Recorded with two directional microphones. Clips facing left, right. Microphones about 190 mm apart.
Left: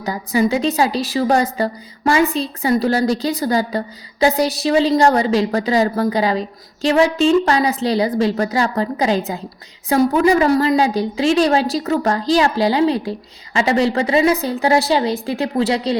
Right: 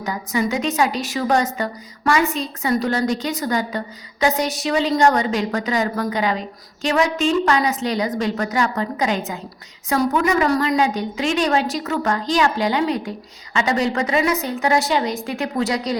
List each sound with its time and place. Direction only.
0.0 s a woman's voice: 35° left (ahead or behind)